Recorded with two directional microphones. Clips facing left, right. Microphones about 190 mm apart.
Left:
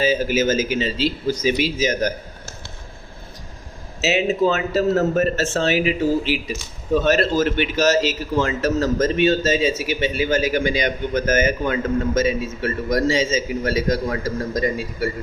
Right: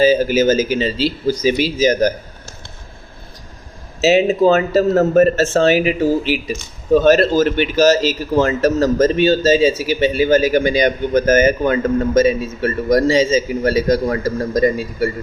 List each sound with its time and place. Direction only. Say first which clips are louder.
0.0 s a man's voice: right 6 dB; 35° right (ahead or behind)
4.0 s a man's voice: right 6 dB; 40° right (ahead or behind)